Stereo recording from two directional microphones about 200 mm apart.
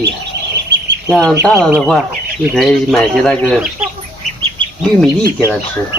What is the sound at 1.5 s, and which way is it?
Speech, 5° right (ahead or behind).